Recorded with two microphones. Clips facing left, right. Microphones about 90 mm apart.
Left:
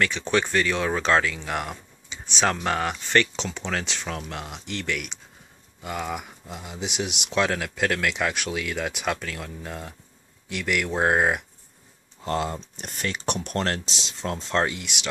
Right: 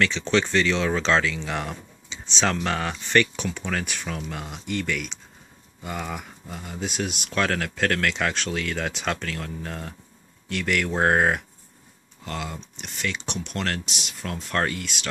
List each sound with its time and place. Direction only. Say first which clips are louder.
0.0 s speech: right 1 dB; 10° left (ahead or behind)
4.5 s speech: right 4 dB; 15° left (ahead or behind)
12.3 s speech: left 6 dB; 35° left (ahead or behind); by 15.0 s 15° left (ahead or behind)